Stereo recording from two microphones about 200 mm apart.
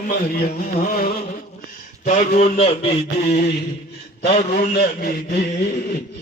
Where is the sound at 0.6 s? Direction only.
45° left (ahead or behind).